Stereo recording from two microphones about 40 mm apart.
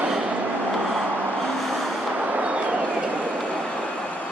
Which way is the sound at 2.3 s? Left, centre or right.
Right.